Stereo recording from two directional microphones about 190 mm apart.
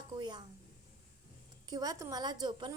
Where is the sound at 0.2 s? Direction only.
25° right (ahead or behind).